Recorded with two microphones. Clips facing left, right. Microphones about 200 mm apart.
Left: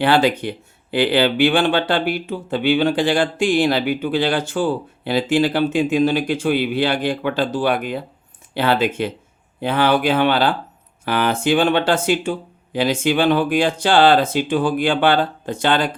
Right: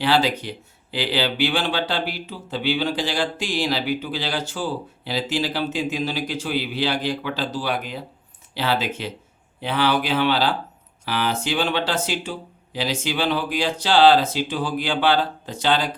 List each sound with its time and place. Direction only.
0.0 s speech: 55° left (ahead or behind)